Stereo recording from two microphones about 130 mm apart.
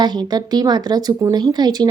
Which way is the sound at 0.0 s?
35° right (ahead or behind).